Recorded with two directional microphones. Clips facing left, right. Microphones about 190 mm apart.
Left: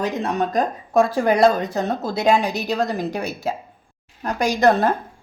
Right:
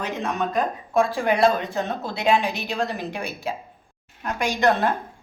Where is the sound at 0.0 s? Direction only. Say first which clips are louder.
Left 4 dB; 35° left (ahead or behind).